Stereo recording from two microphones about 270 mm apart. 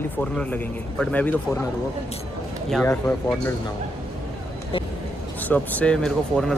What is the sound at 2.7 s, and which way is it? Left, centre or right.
Speech, centre.